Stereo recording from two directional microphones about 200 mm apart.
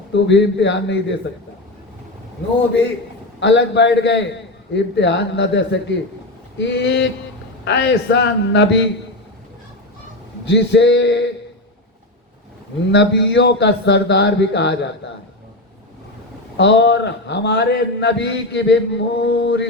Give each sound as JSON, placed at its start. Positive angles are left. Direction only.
{"t": 0.1, "sound": "a man's voice", "side_deg": 60}
{"t": 3.4, "sound": "a man's voice", "side_deg": 60}
{"t": 10.5, "sound": "a man's voice", "side_deg": 60}
{"t": 12.9, "sound": "a man's voice", "side_deg": 60}
{"t": 16.6, "sound": "a man's voice", "side_deg": 60}